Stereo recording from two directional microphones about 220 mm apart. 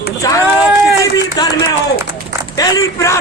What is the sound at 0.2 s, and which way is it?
Speech, 15° left (ahead or behind).